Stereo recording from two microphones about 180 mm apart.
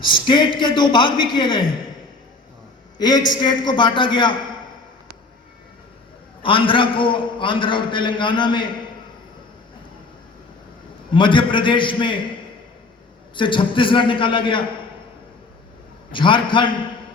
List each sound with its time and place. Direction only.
0.1 s a man's voice: 30° left (ahead or behind)
3.0 s a man's voice: 25° left (ahead or behind)
6.4 s a man's voice: 30° left (ahead or behind)
11.1 s a man's voice: 25° left (ahead or behind)
13.3 s a man's voice: 25° left (ahead or behind)
16.1 s a man's voice: 25° left (ahead or behind)